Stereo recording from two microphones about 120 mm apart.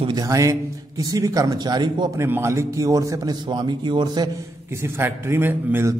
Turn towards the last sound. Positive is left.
turn(degrees=-15)  # may be behind; listen again after turning